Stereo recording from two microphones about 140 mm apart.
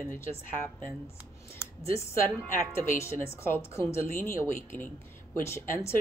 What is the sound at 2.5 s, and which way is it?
A woman's voice, 20° left (ahead or behind).